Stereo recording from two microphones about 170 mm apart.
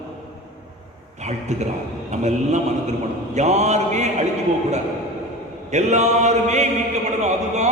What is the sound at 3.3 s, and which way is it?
Chant, 40° right (ahead or behind).